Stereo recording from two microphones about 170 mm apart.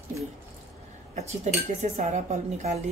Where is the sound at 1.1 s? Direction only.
40° right (ahead or behind).